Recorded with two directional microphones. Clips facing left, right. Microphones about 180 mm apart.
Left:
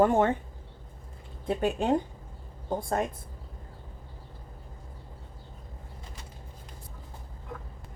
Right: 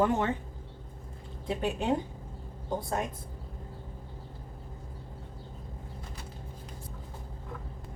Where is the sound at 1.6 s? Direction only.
50° left (ahead or behind).